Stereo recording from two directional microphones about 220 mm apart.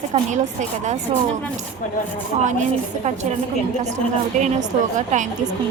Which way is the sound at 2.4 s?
35° right (ahead or behind).